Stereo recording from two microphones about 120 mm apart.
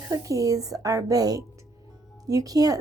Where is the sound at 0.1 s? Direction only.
30° right (ahead or behind).